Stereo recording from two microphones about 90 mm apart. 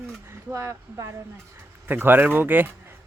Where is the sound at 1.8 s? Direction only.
20° right (ahead or behind).